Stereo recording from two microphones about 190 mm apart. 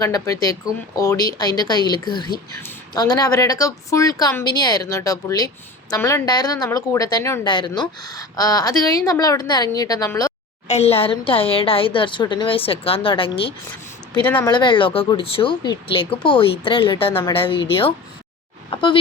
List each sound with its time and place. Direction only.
0.0 s a woman's voice: 20° left (ahead or behind)
10.7 s a woman's voice: 35° left (ahead or behind)
18.7 s speech: 25° left (ahead or behind)